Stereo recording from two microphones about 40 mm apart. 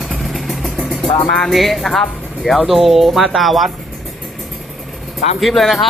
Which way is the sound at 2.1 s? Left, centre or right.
Left.